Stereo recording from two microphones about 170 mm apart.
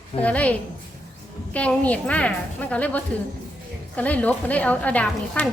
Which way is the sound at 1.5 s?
10° left (ahead or behind).